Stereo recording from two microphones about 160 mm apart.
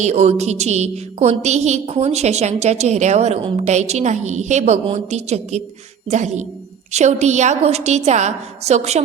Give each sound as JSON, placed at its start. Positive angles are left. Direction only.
{"t": 0.0, "sound": "a woman's voice", "side_deg": -45}